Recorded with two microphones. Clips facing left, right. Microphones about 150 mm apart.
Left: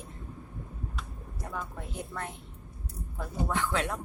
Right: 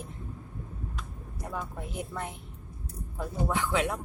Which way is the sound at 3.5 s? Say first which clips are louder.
Right 2 dB; 10° right (ahead or behind).